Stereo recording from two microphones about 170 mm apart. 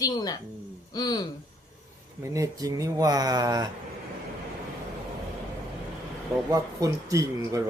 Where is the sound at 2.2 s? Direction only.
20° right (ahead or behind).